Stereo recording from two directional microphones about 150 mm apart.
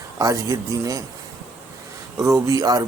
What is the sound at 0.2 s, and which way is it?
Speech, 20° right (ahead or behind).